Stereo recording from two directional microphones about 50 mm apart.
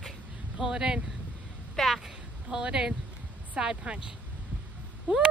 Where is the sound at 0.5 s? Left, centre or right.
Centre.